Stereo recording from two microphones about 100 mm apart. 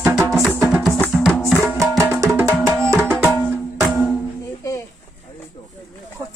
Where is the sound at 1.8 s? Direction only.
30° right (ahead or behind).